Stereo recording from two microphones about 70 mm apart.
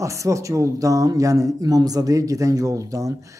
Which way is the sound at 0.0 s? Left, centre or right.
Right.